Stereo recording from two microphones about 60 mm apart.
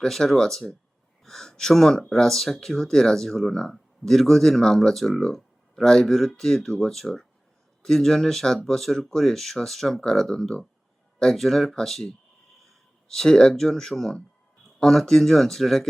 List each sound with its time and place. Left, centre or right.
0.0 s speech: centre